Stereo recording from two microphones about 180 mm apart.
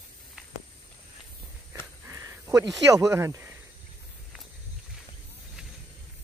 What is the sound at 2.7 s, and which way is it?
Speech, 20° right (ahead or behind).